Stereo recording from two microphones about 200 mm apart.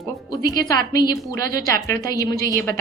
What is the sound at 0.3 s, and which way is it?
A woman's voice, 20° left (ahead or behind).